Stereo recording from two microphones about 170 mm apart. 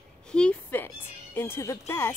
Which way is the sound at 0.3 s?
5° left (ahead or behind).